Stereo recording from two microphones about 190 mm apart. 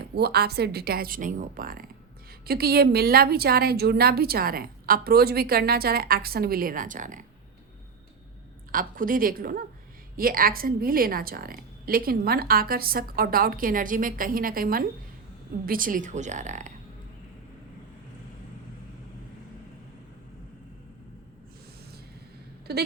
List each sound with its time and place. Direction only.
0.1 s a woman's voice: 55° right (ahead or behind)
8.7 s a woman's voice: 50° right (ahead or behind)
22.7 s speech: 60° right (ahead or behind)